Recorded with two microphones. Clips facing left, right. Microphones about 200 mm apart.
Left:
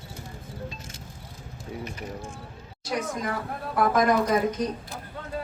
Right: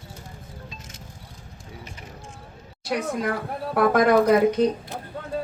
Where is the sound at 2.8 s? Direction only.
65° right (ahead or behind).